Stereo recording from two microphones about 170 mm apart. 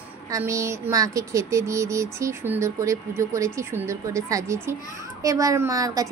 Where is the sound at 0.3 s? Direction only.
20° right (ahead or behind).